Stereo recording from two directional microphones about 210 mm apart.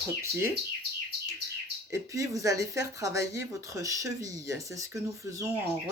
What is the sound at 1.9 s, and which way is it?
Speech, 15° right (ahead or behind).